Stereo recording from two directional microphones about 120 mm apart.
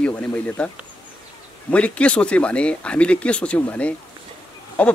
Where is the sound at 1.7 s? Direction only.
10° left (ahead or behind).